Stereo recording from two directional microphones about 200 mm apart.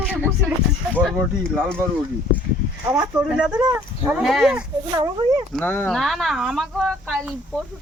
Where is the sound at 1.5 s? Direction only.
5° left (ahead or behind).